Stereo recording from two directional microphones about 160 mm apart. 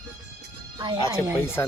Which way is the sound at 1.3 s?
15° left (ahead or behind).